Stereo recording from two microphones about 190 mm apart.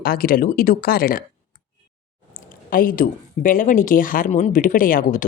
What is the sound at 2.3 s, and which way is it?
Speech, 50° left (ahead or behind).